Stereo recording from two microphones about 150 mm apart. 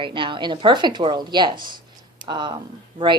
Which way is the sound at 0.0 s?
35° right (ahead or behind).